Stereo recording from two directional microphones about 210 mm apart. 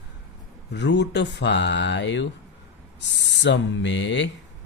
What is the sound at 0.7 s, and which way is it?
Speech, 55° left (ahead or behind).